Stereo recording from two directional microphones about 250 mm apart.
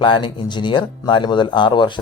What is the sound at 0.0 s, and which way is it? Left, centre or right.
Speech, centre.